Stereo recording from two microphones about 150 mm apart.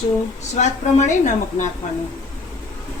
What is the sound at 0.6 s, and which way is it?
Speech, 55° left (ahead or behind).